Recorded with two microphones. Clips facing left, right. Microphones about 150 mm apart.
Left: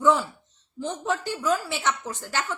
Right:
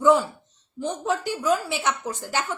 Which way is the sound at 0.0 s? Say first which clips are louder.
Right 3 dB; 15° right (ahead or behind).